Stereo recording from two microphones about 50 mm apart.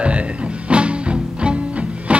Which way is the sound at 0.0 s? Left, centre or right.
Right.